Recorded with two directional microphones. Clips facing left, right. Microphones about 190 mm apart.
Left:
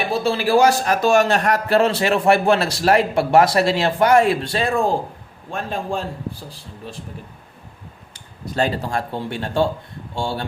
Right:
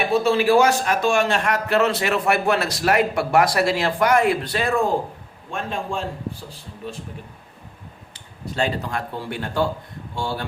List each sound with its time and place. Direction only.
0.1 s a man's voice: 35° left (ahead or behind)
8.1 s a man's voice: 40° left (ahead or behind)